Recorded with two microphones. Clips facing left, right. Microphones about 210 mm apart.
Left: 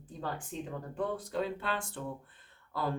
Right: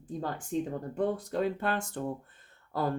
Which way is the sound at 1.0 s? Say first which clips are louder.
Right 4 dB; 45° right (ahead or behind).